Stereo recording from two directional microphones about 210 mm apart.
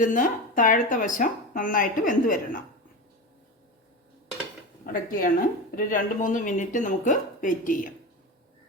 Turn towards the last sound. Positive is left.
turn(degrees=40)  # may be behind; listen again after turning